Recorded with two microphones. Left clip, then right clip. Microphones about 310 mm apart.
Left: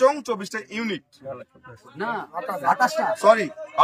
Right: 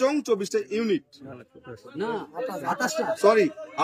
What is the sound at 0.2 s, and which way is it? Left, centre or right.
Speech, centre.